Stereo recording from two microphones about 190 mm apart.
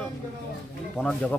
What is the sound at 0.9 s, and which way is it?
Speech, 5° left (ahead or behind).